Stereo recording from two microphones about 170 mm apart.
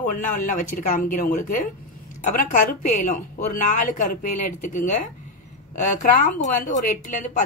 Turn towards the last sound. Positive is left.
turn(degrees=45)  # may be behind; listen again after turning